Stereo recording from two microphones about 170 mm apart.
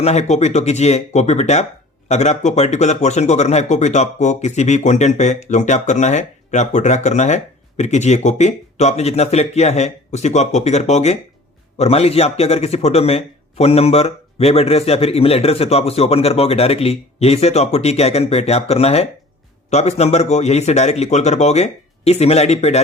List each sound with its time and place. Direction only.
0.0 s a man's voice: 40° left (ahead or behind)